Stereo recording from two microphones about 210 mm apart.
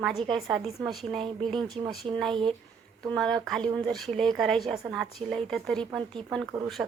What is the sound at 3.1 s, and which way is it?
A woman's voice, centre (ahead or behind).